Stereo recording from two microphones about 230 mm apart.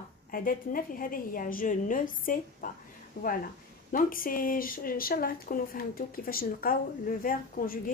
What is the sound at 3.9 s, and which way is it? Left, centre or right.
Speech, left.